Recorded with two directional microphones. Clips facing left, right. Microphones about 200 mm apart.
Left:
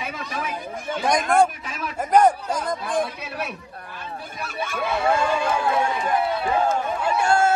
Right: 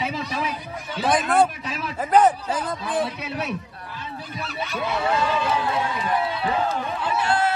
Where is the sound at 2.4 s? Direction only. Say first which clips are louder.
Left 1 dB; 5° right (ahead or behind).